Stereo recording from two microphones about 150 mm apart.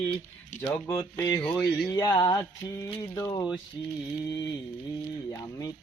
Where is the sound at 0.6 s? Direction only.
20° left (ahead or behind).